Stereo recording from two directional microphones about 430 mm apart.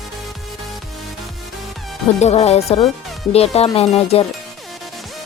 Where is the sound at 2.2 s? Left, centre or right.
Centre.